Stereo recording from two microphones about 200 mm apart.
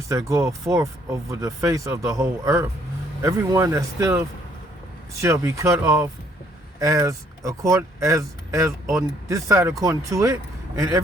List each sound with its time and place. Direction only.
0.1 s speech: 15° right (ahead or behind)
5.2 s speech: 15° right (ahead or behind)